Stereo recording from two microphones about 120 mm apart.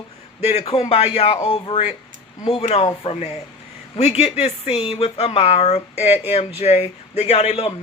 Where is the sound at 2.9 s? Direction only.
55° left (ahead or behind).